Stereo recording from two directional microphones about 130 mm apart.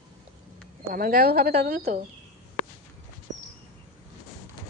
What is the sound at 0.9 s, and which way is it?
Speech, 90° right.